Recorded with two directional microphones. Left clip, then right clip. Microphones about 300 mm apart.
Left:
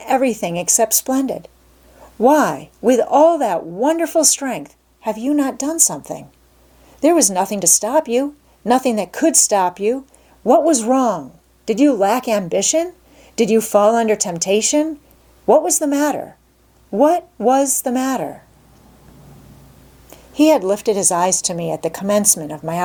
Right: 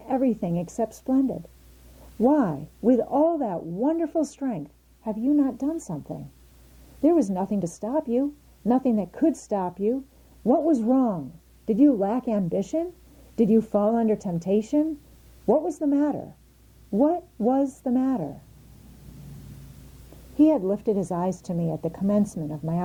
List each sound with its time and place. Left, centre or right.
0.0 s a woman's voice: centre
20.4 s a woman's voice: centre